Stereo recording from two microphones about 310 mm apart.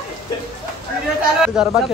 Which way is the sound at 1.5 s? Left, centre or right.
Centre.